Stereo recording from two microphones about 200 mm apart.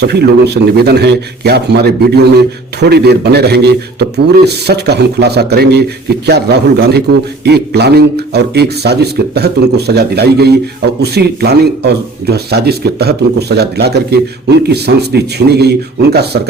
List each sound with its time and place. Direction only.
0.0 s a man's voice: 55° right (ahead or behind)